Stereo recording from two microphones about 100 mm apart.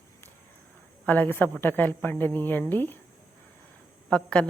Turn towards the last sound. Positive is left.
turn(degrees=10)  # may be behind; listen again after turning